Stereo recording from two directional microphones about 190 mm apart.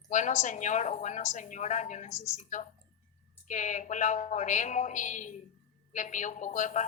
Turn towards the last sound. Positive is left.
turn(degrees=40)  # may be behind; listen again after turning